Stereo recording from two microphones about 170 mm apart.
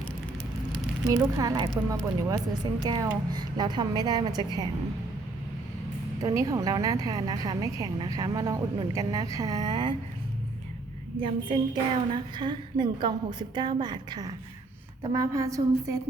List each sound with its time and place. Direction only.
1.0 s a woman's voice: 20° right (ahead or behind)
6.2 s a woman's voice: 20° right (ahead or behind)
11.2 s a woman's voice: 30° right (ahead or behind)